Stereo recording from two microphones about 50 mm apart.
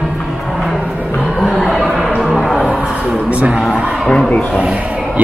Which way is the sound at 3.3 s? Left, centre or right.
Right.